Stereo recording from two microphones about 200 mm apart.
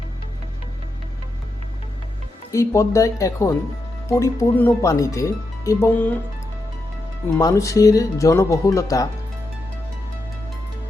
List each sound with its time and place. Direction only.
2.5 s speech: 15° left (ahead or behind)
7.3 s speech: 15° left (ahead or behind)